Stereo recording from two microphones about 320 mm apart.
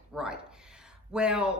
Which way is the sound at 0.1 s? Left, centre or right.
Centre.